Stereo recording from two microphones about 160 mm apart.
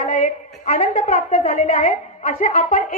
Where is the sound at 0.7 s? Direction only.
50° left (ahead or behind).